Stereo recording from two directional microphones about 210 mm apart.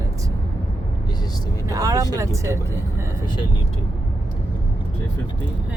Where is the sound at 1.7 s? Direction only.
15° right (ahead or behind).